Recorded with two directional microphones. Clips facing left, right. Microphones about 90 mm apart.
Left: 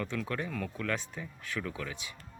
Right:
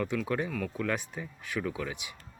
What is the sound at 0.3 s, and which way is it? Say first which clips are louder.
Speech: right 4 dB; 15° right (ahead or behind).